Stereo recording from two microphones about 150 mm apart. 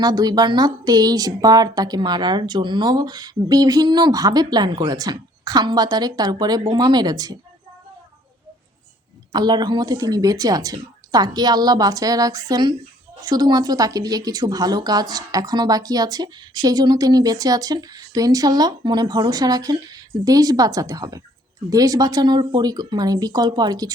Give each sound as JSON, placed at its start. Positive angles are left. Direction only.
{"t": 0.0, "sound": "speech", "side_deg": -25}
{"t": 9.3, "sound": "speech", "side_deg": -30}